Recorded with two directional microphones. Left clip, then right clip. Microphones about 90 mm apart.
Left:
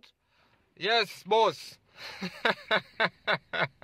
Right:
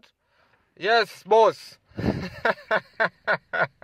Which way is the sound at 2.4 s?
30° right (ahead or behind).